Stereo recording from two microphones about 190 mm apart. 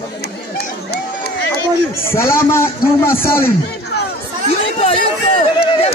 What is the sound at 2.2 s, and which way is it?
A man's voice, 15° left (ahead or behind).